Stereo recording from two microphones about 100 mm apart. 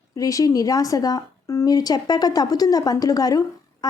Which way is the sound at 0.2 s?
35° left (ahead or behind).